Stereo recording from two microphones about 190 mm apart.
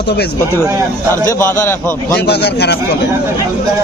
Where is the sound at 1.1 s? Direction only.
15° left (ahead or behind).